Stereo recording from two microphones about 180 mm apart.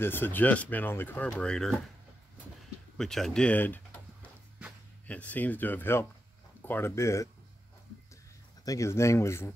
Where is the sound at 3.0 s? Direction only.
Centre (ahead or behind).